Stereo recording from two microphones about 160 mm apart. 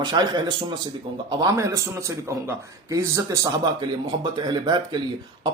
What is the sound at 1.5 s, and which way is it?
A man's voice, 15° right (ahead or behind).